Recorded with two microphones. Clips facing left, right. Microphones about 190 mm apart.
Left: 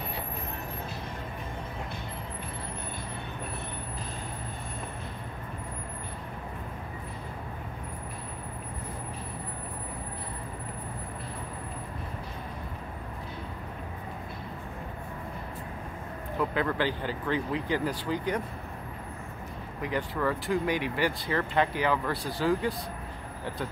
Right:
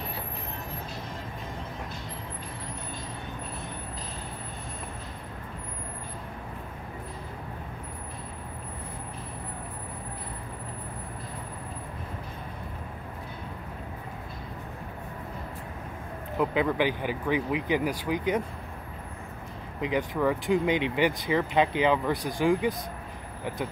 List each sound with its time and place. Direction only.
16.3 s speech: 15° right (ahead or behind)
19.8 s speech: 15° right (ahead or behind)